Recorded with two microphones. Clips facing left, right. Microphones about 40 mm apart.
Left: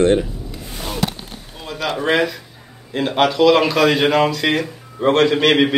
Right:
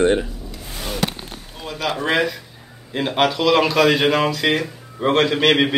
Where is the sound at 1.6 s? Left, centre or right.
Centre.